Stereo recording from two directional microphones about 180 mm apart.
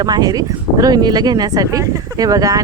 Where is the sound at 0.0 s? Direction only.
20° right (ahead or behind).